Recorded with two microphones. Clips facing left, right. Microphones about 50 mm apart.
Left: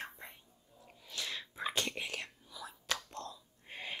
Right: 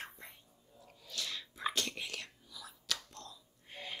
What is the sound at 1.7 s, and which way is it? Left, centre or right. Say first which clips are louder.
Whispering: left 2 dB; left.